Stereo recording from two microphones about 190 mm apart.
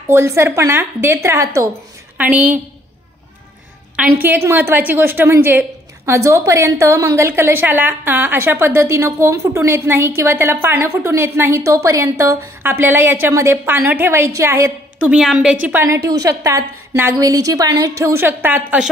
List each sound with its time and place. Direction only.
0.1 s a woman's voice: 15° right (ahead or behind)
3.9 s a woman's voice: 10° right (ahead or behind)